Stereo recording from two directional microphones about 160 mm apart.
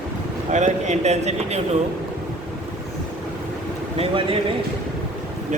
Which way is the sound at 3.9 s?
35° right (ahead or behind).